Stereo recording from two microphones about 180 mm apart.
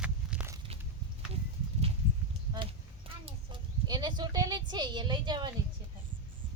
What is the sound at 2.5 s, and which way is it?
Clip-clop, 25° right (ahead or behind).